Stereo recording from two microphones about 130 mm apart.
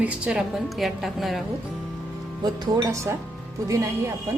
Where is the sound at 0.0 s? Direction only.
5° right (ahead or behind).